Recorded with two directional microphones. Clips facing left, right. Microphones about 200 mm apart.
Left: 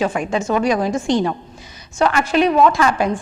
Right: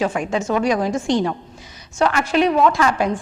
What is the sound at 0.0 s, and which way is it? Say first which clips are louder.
A woman's voice: left 1 dB; 15° left (ahead or behind).